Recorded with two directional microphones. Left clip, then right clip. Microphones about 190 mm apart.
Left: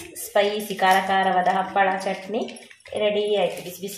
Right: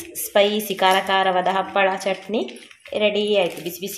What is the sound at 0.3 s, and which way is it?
Speech, 45° right (ahead or behind).